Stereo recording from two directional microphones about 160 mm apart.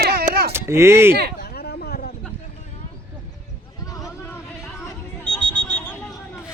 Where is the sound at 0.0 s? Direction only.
75° right (ahead or behind).